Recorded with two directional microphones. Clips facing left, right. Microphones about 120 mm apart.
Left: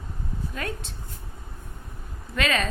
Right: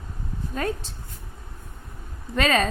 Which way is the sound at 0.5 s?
40° right (ahead or behind).